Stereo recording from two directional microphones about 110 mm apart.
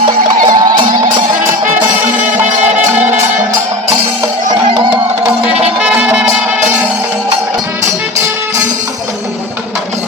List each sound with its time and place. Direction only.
0.4 s music: 40° right (ahead or behind)
5.8 s music: 10° right (ahead or behind)